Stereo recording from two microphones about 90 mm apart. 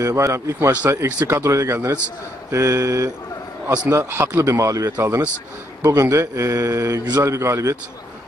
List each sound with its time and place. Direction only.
0.0 s speech: 35° right (ahead or behind)
4.5 s speech: 40° right (ahead or behind)